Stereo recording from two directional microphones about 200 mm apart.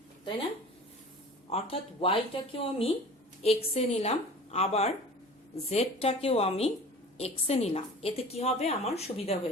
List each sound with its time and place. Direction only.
1.5 s a woman's voice: 30° left (ahead or behind)